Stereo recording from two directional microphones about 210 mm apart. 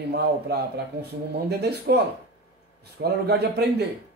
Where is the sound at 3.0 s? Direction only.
50° right (ahead or behind).